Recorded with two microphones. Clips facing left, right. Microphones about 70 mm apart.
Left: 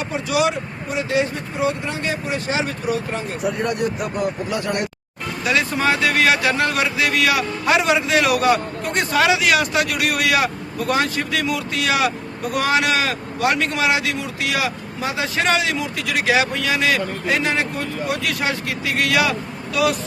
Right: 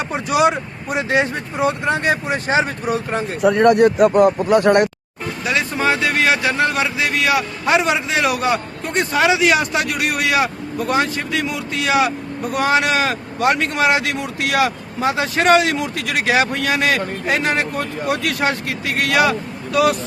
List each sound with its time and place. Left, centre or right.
0.1 s speech: right
3.4 s speech: right
5.5 s vehicle: centre
6.6 s a man's voice: centre
9.4 s speech: right
17.4 s speech: right